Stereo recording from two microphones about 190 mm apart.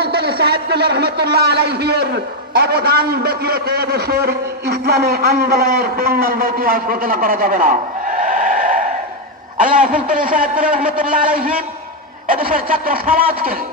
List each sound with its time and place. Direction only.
0.0 s a man's voice: 55° right (ahead or behind)